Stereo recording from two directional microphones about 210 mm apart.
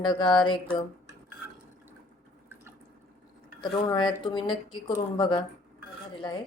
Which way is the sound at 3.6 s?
20° left (ahead or behind).